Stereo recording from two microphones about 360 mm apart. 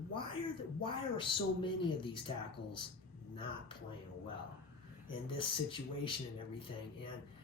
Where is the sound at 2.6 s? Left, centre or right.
Left.